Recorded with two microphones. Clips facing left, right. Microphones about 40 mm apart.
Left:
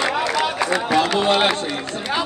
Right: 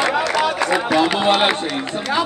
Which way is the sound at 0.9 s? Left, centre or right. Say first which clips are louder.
Right 1 dB; centre.